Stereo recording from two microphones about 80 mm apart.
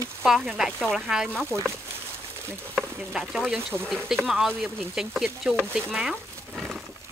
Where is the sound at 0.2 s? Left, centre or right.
Centre.